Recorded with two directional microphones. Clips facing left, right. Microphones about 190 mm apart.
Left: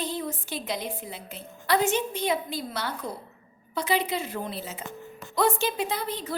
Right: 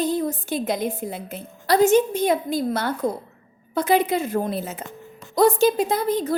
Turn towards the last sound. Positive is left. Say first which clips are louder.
# right 9 dB
turn(degrees=-45)  # may be behind; listen again after turning